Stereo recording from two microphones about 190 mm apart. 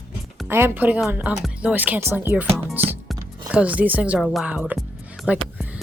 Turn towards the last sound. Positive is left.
turn(degrees=-5)  # may be behind; listen again after turning